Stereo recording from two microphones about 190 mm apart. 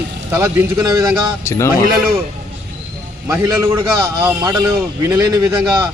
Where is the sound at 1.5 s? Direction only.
15° left (ahead or behind).